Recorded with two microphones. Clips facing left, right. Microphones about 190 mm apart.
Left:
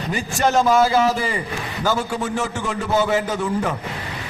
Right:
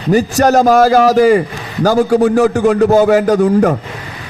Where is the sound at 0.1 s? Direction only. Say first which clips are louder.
Right 10 dB; 40° right (ahead or behind).